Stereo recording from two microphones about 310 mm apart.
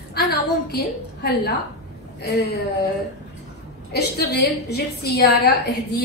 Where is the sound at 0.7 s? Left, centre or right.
Left.